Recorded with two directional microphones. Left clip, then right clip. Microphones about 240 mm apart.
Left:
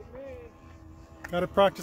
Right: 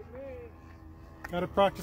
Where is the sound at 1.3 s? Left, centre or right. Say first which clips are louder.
Left 3 dB; left.